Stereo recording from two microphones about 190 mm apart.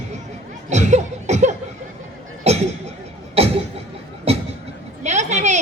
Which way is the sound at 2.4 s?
35° right (ahead or behind).